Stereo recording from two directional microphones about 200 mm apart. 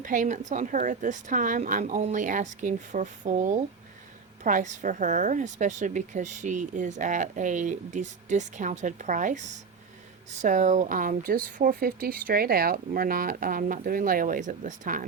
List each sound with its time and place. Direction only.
0.0 s a woman's voice: 40° right (ahead or behind)
10.4 s speech: 40° right (ahead or behind)